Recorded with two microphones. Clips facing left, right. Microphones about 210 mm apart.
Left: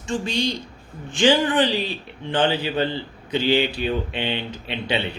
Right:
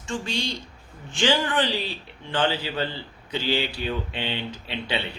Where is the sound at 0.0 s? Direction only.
15° left (ahead or behind).